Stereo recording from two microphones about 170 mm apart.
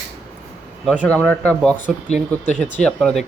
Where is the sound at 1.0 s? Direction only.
5° left (ahead or behind).